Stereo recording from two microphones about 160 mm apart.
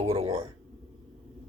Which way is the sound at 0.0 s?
40° right (ahead or behind).